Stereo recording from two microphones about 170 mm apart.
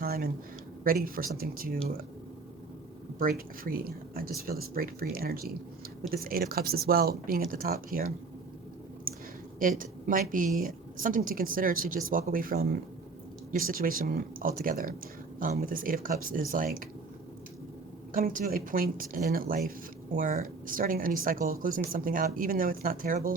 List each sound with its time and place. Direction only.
0.0 s a man's voice: 60° right (ahead or behind)
3.2 s a woman's voice: 55° right (ahead or behind)
9.6 s a woman's voice: 50° right (ahead or behind)
18.1 s a woman's voice: 55° right (ahead or behind)